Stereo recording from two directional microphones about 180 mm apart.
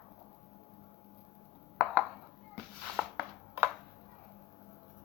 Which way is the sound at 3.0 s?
5° right (ahead or behind).